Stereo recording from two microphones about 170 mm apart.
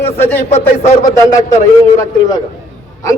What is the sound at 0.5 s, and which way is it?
Speech, 40° left (ahead or behind).